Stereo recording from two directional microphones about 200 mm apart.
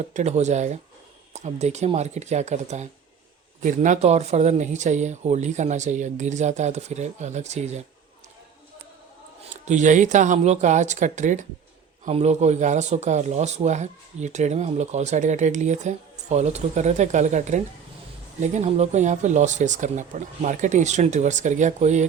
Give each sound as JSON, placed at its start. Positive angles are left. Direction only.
{"t": 0.1, "sound": "speech", "side_deg": -35}
{"t": 9.6, "sound": "speech", "side_deg": -35}